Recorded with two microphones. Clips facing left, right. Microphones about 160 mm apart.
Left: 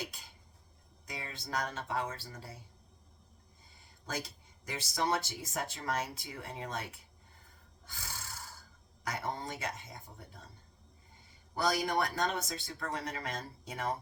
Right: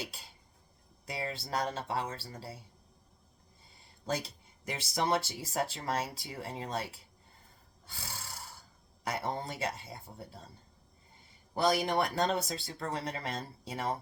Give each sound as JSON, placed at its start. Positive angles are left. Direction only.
{"t": 1.0, "sound": "speech", "side_deg": -30}
{"t": 4.0, "sound": "speech", "side_deg": -30}
{"t": 7.9, "sound": "a sound", "side_deg": -30}
{"t": 9.0, "sound": "speech", "side_deg": -30}
{"t": 11.5, "sound": "speech", "side_deg": -25}